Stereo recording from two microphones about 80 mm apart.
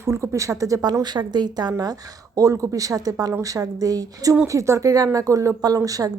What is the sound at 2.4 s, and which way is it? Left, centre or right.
A woman's voice, right.